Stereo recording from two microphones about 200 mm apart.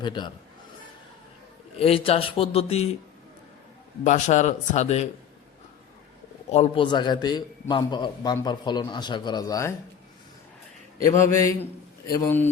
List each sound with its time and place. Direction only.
0.0 s a man's voice: 25° left (ahead or behind)
1.8 s a man's voice: 30° left (ahead or behind)
4.0 s speech: 35° left (ahead or behind)
6.5 s a man's voice: 30° left (ahead or behind)
11.0 s a man's voice: 15° left (ahead or behind)